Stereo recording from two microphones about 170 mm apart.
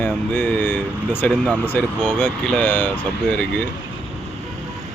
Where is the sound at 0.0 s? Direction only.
10° left (ahead or behind).